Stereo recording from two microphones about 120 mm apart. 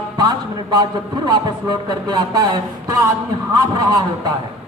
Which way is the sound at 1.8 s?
35° right (ahead or behind).